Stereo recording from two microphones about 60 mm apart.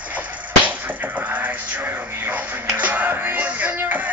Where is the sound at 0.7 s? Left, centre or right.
Right.